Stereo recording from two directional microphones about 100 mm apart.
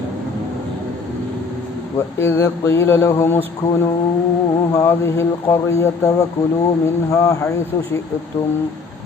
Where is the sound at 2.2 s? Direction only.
25° left (ahead or behind).